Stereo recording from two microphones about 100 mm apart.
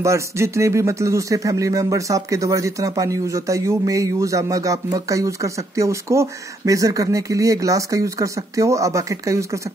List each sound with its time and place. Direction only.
0.0 s speech: 30° right (ahead or behind)